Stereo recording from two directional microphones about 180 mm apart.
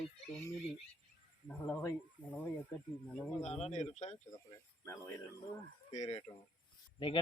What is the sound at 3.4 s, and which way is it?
Speech, 35° left (ahead or behind).